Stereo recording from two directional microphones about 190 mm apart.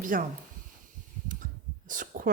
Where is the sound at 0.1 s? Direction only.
45° right (ahead or behind).